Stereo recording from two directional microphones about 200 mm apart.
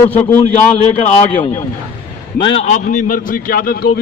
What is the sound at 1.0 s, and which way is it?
Speech, 35° left (ahead or behind).